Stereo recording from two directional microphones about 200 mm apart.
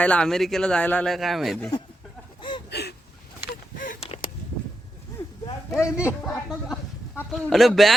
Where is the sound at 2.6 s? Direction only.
55° left (ahead or behind).